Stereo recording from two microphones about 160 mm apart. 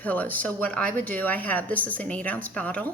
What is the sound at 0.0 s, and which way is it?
Speech, 10° left (ahead or behind).